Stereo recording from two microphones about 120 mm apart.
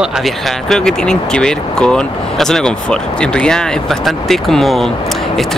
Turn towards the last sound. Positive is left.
turn(degrees=5)  # may be behind; listen again after turning